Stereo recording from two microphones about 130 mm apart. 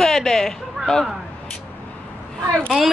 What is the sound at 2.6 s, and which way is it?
Speech, centre (ahead or behind).